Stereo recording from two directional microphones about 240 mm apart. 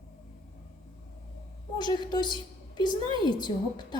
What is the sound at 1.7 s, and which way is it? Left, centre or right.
A woman's voice, centre.